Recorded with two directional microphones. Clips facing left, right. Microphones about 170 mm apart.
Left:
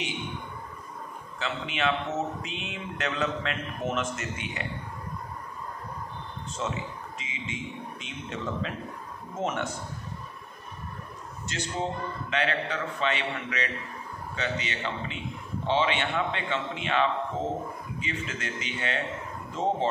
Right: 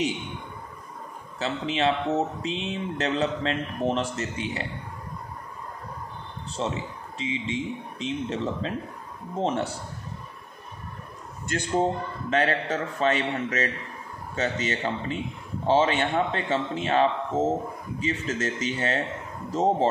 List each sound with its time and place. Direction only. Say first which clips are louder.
1.4 s speech: right 4 dB; 35° right (ahead or behind)
6.5 s speech: right 3 dB; 35° right (ahead or behind)
11.4 s a man's voice: right 7 dB; 50° right (ahead or behind)